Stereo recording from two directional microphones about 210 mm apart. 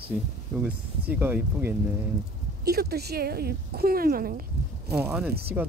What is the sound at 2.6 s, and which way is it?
Speech, 50° right (ahead or behind).